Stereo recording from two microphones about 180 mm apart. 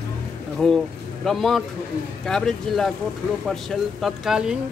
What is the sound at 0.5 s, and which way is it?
Speech, centre (ahead or behind).